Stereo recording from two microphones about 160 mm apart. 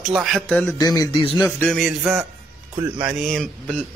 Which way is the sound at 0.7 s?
25° left (ahead or behind).